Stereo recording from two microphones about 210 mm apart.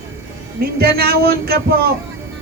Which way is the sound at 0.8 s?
45° right (ahead or behind).